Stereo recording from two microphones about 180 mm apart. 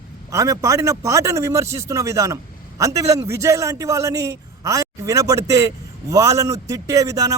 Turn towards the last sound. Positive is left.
turn(degrees=-20)  # may be behind; listen again after turning